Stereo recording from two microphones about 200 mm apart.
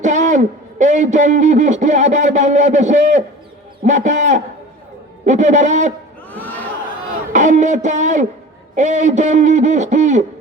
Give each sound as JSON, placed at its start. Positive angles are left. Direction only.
{"t": 0.0, "sound": "a man's voice", "side_deg": -35}
{"t": 6.3, "sound": "crowd", "side_deg": 10}
{"t": 7.3, "sound": "a man's voice", "side_deg": -35}